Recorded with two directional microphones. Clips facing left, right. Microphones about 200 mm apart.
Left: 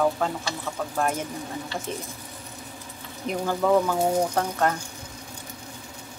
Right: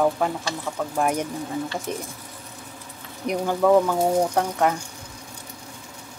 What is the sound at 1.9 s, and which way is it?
Speech, 15° right (ahead or behind).